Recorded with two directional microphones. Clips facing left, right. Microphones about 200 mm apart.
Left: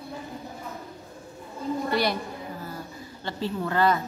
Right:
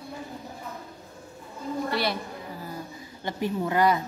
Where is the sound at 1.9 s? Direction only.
Centre (ahead or behind).